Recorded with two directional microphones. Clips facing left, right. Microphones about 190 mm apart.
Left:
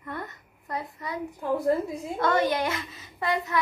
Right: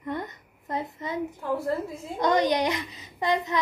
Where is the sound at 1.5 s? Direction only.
15° left (ahead or behind).